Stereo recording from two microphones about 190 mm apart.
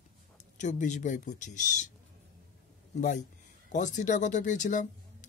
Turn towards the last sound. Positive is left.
turn(degrees=40)  # may be behind; listen again after turning